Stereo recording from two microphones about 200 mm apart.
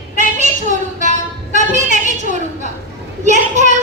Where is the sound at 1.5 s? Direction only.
35° right (ahead or behind).